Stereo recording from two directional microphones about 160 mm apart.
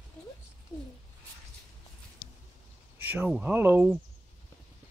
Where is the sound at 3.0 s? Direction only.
10° right (ahead or behind).